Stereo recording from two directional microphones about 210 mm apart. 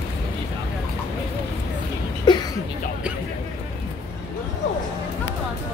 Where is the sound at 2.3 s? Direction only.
20° left (ahead or behind).